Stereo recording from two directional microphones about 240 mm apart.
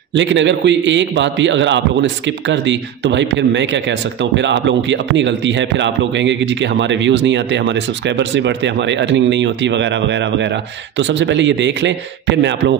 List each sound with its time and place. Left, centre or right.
0.1 s a man's voice: right